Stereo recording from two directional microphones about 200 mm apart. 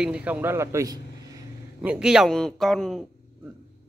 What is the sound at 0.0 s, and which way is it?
A man's voice, 5° right (ahead or behind).